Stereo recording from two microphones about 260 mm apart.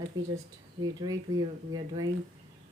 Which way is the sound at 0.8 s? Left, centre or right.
Centre.